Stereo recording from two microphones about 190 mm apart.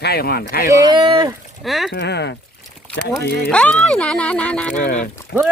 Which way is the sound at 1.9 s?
60° left (ahead or behind).